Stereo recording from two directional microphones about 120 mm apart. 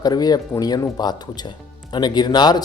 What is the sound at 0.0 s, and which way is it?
Speech, 35° left (ahead or behind).